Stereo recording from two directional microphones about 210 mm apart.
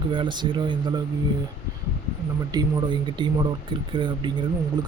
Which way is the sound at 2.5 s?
20° right (ahead or behind).